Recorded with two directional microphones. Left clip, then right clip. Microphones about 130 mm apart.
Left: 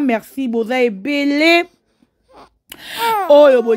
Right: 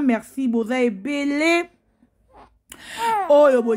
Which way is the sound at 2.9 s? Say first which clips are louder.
Left 5 dB; 50° left (ahead or behind).